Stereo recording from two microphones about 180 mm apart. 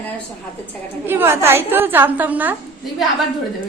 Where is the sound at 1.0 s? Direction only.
15° right (ahead or behind).